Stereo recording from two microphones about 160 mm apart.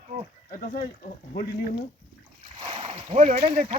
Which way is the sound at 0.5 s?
60° left (ahead or behind).